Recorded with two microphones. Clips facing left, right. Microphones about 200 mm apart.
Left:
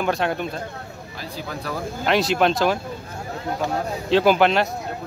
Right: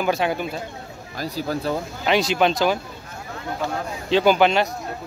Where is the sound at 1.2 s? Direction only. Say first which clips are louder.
Right 7 dB; 35° right (ahead or behind).